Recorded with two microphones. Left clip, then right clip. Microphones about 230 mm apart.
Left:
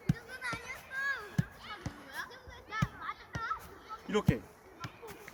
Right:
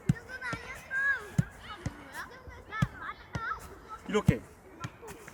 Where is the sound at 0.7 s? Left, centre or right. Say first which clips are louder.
Right 9 dB; left.